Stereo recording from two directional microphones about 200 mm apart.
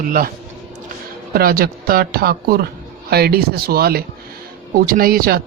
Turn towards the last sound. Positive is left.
turn(degrees=-50)  # may be behind; listen again after turning